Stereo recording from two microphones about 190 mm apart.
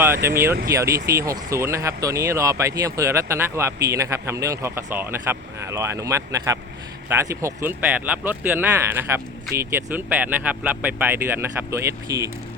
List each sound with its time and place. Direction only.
0.2 s speech: 15° right (ahead or behind)